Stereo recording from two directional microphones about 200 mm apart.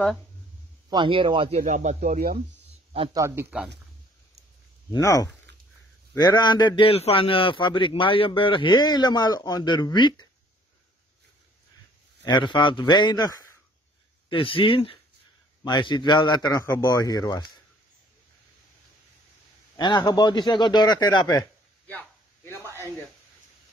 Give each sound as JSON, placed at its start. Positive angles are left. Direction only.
{"t": 0.8, "sound": "a man's voice", "side_deg": -25}
{"t": 1.6, "sound": "speech", "side_deg": -35}
{"t": 2.9, "sound": "speech", "side_deg": -25}
{"t": 3.2, "sound": "speech", "side_deg": -10}
{"t": 4.9, "sound": "a man's voice", "side_deg": 15}
{"t": 12.3, "sound": "a man's voice", "side_deg": 20}
{"t": 14.3, "sound": "a man's voice", "side_deg": 25}
{"t": 19.8, "sound": "a man's voice", "side_deg": 25}